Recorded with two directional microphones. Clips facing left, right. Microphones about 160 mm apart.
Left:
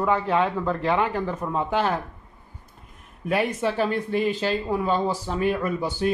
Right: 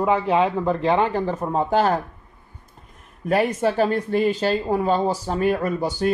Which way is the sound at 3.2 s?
45° right (ahead or behind).